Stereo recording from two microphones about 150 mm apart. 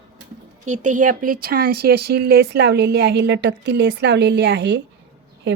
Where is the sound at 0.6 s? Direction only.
55° right (ahead or behind); by 3.0 s 90° right.